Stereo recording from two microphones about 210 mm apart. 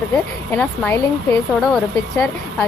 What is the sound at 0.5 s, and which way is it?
A woman's voice, 10° left (ahead or behind).